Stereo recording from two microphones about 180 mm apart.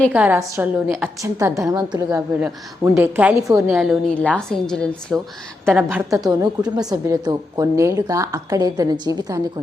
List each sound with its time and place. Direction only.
0.1 s a woman's voice: 10° right (ahead or behind)
5.6 s a woman's voice: 10° right (ahead or behind)
6.2 s a woman's voice: 20° right (ahead or behind)